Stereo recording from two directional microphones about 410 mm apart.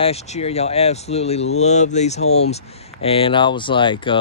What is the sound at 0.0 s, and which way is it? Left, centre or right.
Speech, centre.